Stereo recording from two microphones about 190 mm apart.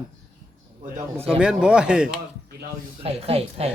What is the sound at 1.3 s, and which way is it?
Speech, 5° right (ahead or behind).